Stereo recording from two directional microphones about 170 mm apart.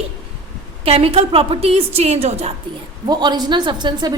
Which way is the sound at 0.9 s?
35° right (ahead or behind).